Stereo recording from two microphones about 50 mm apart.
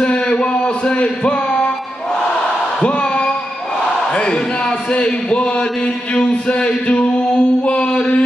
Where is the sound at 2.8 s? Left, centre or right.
Left.